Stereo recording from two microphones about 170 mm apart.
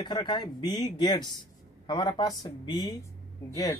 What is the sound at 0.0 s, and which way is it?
Speech, 25° left (ahead or behind).